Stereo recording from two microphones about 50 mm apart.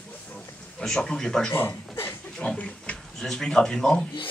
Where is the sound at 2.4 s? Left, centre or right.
Left.